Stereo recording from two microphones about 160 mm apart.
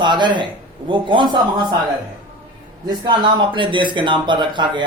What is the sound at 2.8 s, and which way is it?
Speech, 25° right (ahead or behind).